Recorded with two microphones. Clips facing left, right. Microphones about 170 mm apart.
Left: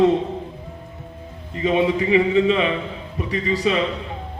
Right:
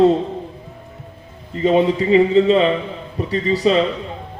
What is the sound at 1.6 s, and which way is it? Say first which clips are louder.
A man's voice: right 4 dB; 35° right (ahead or behind).